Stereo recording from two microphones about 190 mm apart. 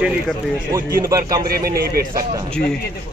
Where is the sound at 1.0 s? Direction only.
20° right (ahead or behind).